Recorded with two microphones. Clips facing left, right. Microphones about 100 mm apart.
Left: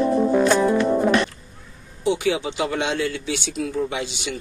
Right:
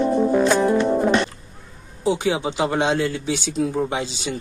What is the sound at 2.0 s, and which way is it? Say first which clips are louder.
Speech: right 1 dB; 30° right (ahead or behind).